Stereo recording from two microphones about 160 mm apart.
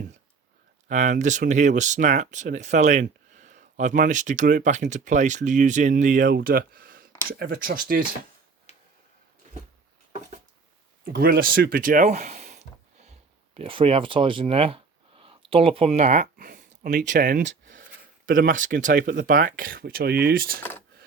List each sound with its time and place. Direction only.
0.9 s speech: 50° right (ahead or behind)
8.7 s tick-tock: 45° left (ahead or behind)
11.0 s speech: 65° right (ahead or behind); by 12.6 s 45° right (ahead or behind)
13.1 s a sound: 35° right (ahead or behind); by 17.8 s 55° right (ahead or behind)
18.3 s speech: 55° right (ahead or behind)